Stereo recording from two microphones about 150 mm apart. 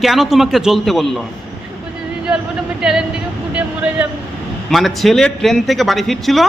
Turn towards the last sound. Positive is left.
turn(degrees=0)  # may be behind; listen again after turning